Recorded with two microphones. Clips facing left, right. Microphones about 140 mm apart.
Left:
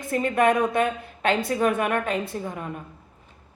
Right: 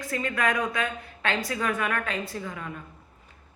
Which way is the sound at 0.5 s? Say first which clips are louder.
Left 6 dB; 55° left (ahead or behind).